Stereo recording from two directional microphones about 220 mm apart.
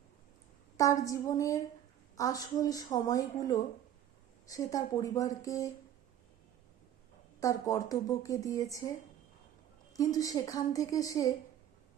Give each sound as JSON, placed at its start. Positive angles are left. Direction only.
{"t": 0.8, "sound": "speech", "side_deg": 15}
{"t": 7.3, "sound": "speech", "side_deg": 15}